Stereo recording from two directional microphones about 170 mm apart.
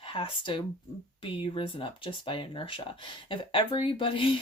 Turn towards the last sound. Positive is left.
turn(degrees=30)  # may be behind; listen again after turning